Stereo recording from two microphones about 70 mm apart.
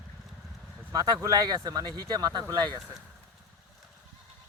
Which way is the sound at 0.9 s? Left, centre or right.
Right.